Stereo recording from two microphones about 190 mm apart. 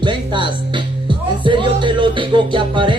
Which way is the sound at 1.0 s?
25° right (ahead or behind).